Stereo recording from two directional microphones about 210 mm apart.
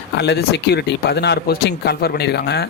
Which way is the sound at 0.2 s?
55° left (ahead or behind).